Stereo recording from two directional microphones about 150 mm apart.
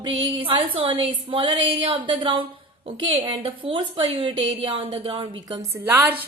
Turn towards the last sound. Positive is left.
turn(degrees=-10)  # may be behind; listen again after turning